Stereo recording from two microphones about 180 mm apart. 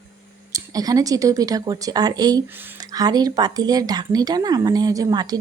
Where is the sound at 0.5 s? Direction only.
20° right (ahead or behind).